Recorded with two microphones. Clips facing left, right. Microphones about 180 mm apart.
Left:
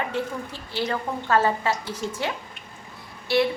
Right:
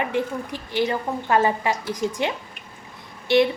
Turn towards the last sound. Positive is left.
turn(degrees=-20)  # may be behind; listen again after turning